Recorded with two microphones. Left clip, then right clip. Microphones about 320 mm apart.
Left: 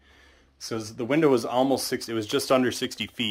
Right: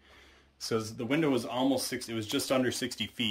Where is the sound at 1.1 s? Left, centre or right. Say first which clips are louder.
Left 9 dB; centre.